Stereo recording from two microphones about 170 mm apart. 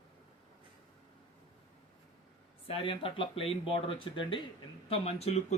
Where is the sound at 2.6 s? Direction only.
30° left (ahead or behind).